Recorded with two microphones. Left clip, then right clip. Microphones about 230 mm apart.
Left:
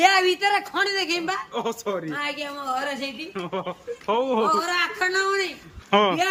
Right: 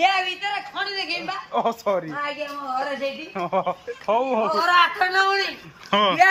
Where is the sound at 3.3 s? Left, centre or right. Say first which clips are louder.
Right 8 dB; centre.